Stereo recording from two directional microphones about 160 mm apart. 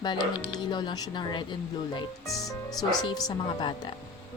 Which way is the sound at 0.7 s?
30° left (ahead or behind).